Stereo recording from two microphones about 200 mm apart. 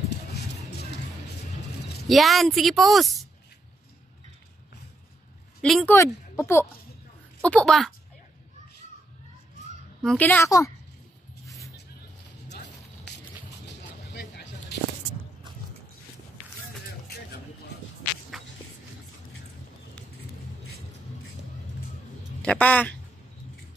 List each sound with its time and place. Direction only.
2.0 s a woman's voice: centre (ahead or behind)
5.6 s a woman's voice: 5° left (ahead or behind)
10.0 s a woman's voice: 10° left (ahead or behind)
11.4 s vehicle: 15° left (ahead or behind)
14.1 s vehicle: 55° left (ahead or behind)
22.4 s a woman's voice: 5° left (ahead or behind)